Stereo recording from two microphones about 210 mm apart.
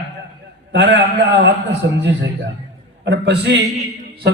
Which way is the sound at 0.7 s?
55° right (ahead or behind).